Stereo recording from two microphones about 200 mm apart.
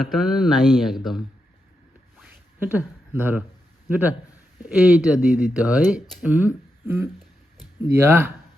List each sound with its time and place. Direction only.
0.0 s speech: centre (ahead or behind)
2.1 s zipper: 10° right (ahead or behind)
3.8 s a man's voice: 10° right (ahead or behind)